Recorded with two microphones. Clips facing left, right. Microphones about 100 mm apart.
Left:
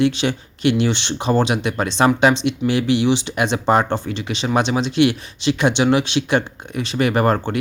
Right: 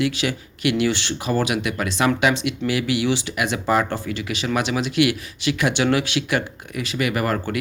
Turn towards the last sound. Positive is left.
turn(degrees=30)  # may be behind; listen again after turning